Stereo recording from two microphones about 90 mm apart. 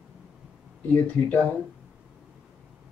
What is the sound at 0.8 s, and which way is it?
Speech, 15° left (ahead or behind).